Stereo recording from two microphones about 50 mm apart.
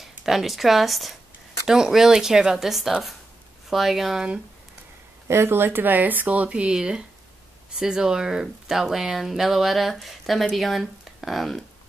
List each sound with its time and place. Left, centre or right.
0.0 s speech: centre
5.3 s speech: right; by 11.6 s centre